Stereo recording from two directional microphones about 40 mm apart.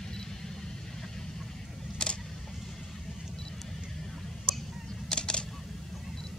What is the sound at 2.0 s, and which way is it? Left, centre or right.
Vehicle, left.